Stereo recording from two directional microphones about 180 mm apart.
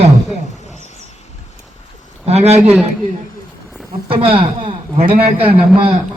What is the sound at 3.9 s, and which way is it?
A man's voice, 30° right (ahead or behind).